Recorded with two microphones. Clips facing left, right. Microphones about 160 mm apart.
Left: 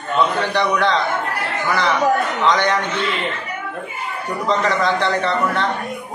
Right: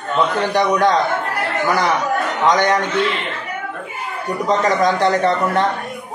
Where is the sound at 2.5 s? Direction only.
45° right (ahead or behind).